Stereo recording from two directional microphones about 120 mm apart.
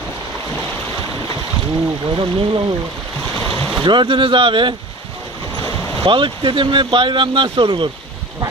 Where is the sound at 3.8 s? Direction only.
40° right (ahead or behind).